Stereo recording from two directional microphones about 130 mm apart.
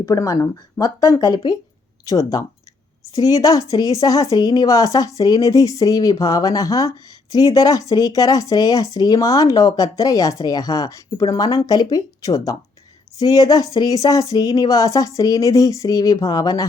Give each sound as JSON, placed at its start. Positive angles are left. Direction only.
{"t": 0.0, "sound": "speech", "side_deg": 25}